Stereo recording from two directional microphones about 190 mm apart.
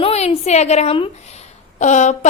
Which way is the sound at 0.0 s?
30° left (ahead or behind).